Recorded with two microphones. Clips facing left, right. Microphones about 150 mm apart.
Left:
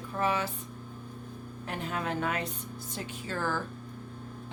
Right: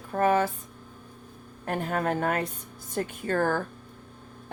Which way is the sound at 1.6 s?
50° right (ahead or behind).